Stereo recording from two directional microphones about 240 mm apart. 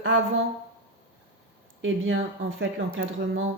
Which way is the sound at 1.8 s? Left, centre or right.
Right.